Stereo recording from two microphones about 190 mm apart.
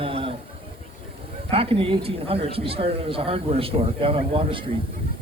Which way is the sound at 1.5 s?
30° right (ahead or behind).